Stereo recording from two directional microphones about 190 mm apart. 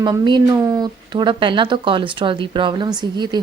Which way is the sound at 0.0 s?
25° right (ahead or behind).